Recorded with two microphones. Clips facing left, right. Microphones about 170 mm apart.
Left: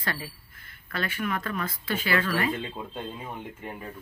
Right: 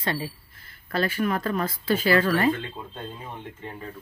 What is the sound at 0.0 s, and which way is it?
Speech, 25° right (ahead or behind).